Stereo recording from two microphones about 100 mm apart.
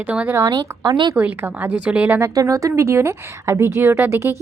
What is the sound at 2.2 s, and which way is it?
A woman's voice, 35° right (ahead or behind).